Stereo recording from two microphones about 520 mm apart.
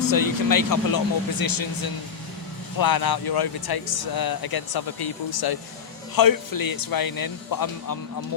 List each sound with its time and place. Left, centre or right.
0.1 s speech: left